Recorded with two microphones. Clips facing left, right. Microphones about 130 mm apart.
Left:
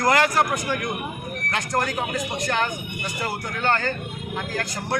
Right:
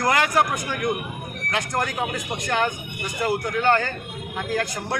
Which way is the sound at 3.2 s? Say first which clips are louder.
Right 5 dB; 15° right (ahead or behind).